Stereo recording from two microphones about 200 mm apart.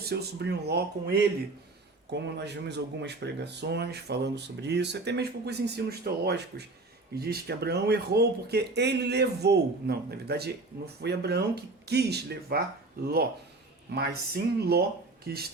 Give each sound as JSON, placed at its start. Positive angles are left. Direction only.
{"t": 0.0, "sound": "speech", "side_deg": -55}
{"t": 2.1, "sound": "speech", "side_deg": -60}
{"t": 13.9, "sound": "speech", "side_deg": -55}